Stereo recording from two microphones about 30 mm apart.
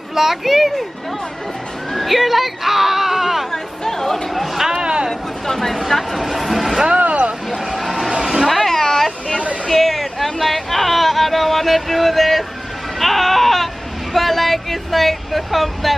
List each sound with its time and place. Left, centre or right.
0.1 s a child's voice: centre
1.9 s speech: centre
3.5 s chatter: centre
4.3 s a sound: centre
4.7 s boat: right
5.5 s speech: centre
7.0 s vehicle: right
7.4 s vehicle: centre
7.8 s a sound: centre
8.1 s a sound: centre
8.5 s a sound: centre
13.0 s music: centre
14.1 s speech: centre